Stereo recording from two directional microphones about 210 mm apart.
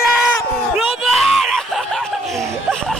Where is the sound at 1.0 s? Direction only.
Centre (ahead or behind).